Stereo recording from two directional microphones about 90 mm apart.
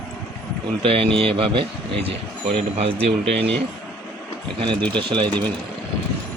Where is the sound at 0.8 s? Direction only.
90° right.